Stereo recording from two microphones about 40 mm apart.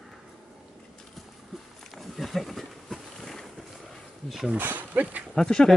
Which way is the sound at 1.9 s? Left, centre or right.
Centre.